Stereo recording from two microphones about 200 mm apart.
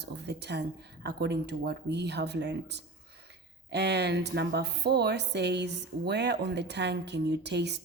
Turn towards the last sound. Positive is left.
turn(degrees=-55)  # may be behind; listen again after turning